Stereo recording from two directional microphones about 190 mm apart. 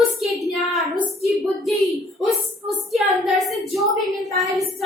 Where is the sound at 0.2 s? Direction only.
Centre (ahead or behind).